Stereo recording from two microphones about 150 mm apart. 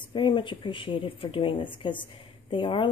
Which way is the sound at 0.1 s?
30° left (ahead or behind).